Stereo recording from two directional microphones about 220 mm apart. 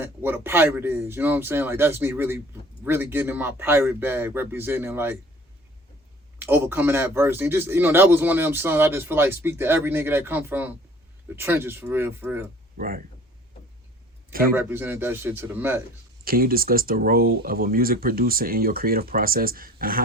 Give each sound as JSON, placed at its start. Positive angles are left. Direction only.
{"t": 0.0, "sound": "speech", "side_deg": -10}
{"t": 6.4, "sound": "speech", "side_deg": -10}
{"t": 12.7, "sound": "speech", "side_deg": -40}
{"t": 14.5, "sound": "speech", "side_deg": -10}
{"t": 16.2, "sound": "speech", "side_deg": -40}